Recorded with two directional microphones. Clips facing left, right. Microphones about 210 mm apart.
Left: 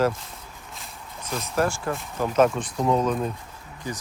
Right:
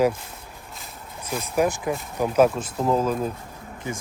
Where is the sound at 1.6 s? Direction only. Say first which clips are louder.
Right 2 dB; 15° right (ahead or behind).